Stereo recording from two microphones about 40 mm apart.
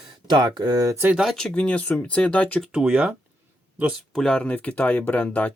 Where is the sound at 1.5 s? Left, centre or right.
Left.